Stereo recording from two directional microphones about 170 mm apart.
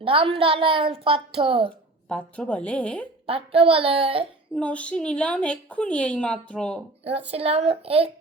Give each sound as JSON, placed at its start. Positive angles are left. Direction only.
{"t": 0.0, "sound": "a woman's voice", "side_deg": -35}
{"t": 2.0, "sound": "a woman's voice", "side_deg": 5}
{"t": 3.2, "sound": "a woman's voice", "side_deg": -35}
{"t": 4.5, "sound": "a woman's voice", "side_deg": 5}
{"t": 7.3, "sound": "a woman's voice", "side_deg": -35}